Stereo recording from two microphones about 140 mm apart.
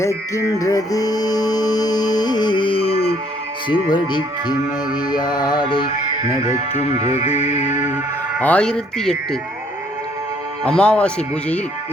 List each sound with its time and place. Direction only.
0.0 s music: 20° left (ahead or behind); by 3.2 s 45° left (ahead or behind)
3.7 s speech: 35° left (ahead or behind)
7.0 s speech: 15° right (ahead or behind)
8.4 s speech: 10° left (ahead or behind)
10.6 s speech: 10° left (ahead or behind)